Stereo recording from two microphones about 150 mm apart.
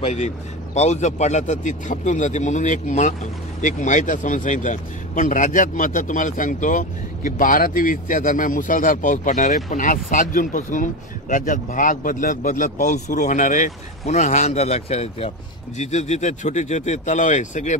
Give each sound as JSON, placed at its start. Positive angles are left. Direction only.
{"t": 0.0, "sound": "speech", "side_deg": 45}